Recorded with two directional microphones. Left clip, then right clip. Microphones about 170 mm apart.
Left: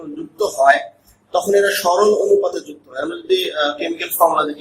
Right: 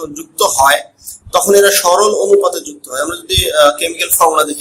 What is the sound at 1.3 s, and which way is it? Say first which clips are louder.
A man's voice: right 6 dB; 40° right (ahead or behind).